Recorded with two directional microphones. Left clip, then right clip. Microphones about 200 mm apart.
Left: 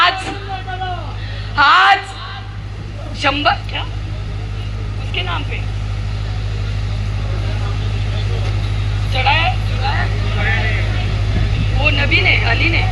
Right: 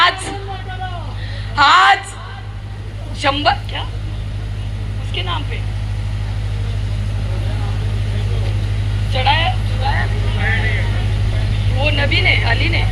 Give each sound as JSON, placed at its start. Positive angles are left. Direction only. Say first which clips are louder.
{"t": 0.0, "sound": "vehicle", "louder": "even", "side_deg": -20}
{"t": 1.5, "sound": "a sound", "louder": "even", "side_deg": -20}
{"t": 3.2, "sound": "speech", "louder": "even", "side_deg": -20}
{"t": 5.1, "sound": "speech", "louder": "left 1 dB", "side_deg": -25}
{"t": 9.1, "sound": "vehicle", "louder": "left 1 dB", "side_deg": -25}
{"t": 11.8, "sound": "speech", "louder": "left 2 dB", "side_deg": -20}